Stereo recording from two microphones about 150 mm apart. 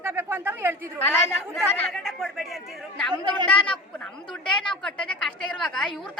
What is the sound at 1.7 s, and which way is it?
Speech, 5° left (ahead or behind).